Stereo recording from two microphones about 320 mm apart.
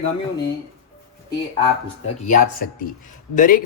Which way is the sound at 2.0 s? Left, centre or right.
Left.